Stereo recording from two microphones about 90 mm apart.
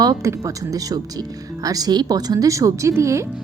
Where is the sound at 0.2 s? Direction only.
35° right (ahead or behind).